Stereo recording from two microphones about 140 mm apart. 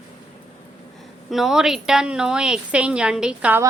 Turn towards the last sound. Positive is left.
turn(degrees=-10)  # may be behind; listen again after turning